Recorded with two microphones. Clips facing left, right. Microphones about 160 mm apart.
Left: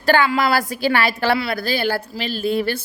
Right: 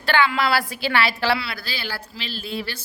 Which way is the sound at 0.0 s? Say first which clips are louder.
Left 4 dB; 45° left (ahead or behind).